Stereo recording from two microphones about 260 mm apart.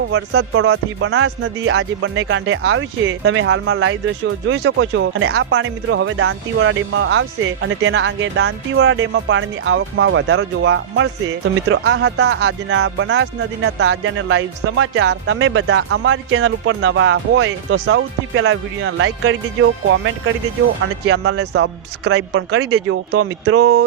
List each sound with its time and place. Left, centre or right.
0.1 s speech: right
21.0 s speech: right